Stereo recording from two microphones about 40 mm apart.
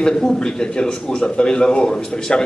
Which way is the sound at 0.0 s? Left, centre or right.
Centre.